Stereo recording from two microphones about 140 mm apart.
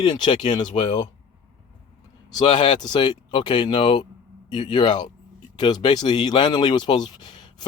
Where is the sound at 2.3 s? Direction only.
35° left (ahead or behind).